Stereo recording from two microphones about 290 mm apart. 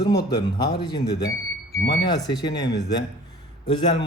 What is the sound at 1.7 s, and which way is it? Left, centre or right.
Speech, left.